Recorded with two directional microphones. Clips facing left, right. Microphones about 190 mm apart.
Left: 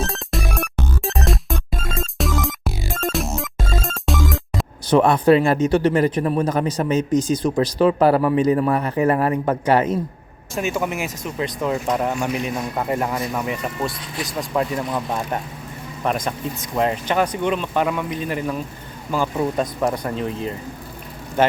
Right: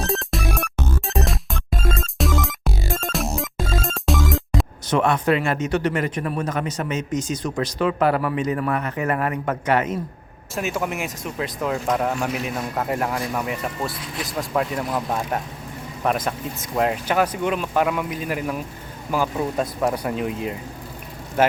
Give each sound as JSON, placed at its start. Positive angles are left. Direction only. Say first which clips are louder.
{"t": 0.1, "sound": "music", "louder": "right 2 dB", "side_deg": 0}
{"t": 4.9, "sound": "speech", "louder": "left 6 dB", "side_deg": 35}
{"t": 10.5, "sound": "speech", "louder": "left 2 dB", "side_deg": 0}